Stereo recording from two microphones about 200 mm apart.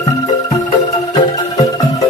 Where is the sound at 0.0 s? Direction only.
20° left (ahead or behind).